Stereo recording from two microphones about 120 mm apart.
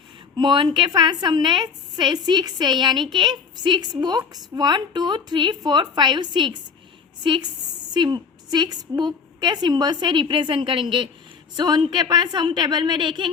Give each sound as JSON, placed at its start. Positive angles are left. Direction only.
{"t": 0.3, "sound": "a woman's voice", "side_deg": -40}